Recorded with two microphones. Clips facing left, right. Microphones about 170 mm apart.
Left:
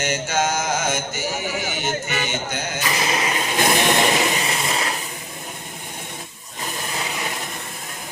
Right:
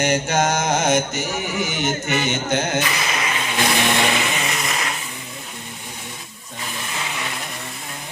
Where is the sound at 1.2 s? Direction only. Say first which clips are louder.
Right 1 dB; 20° right (ahead or behind).